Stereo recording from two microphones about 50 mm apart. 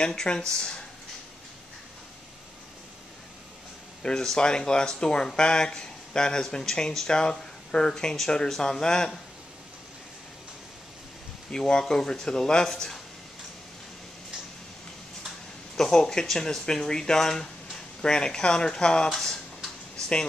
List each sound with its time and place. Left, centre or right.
0.0 s speech: centre
4.0 s speech: centre
11.5 s speech: centre
15.7 s speech: centre